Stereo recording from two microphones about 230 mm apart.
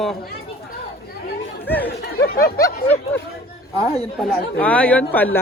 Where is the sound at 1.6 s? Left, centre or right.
Centre.